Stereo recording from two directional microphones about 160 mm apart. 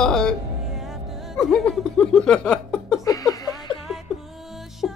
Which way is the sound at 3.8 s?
Centre (ahead or behind).